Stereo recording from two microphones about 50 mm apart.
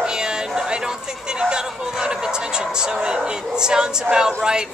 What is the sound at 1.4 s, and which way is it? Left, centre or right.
Speech, centre.